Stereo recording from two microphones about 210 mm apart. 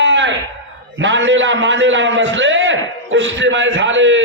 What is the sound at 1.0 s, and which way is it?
A man's voice, 60° right (ahead or behind).